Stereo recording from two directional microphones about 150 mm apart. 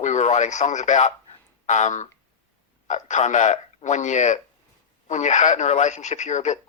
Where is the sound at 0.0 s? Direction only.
50° left (ahead or behind).